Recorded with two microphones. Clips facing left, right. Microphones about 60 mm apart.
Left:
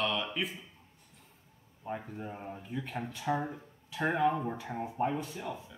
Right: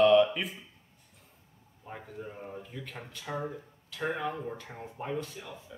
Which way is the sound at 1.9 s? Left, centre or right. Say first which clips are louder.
Even; left.